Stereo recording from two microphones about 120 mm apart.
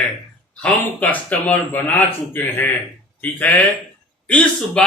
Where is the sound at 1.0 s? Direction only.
15° left (ahead or behind).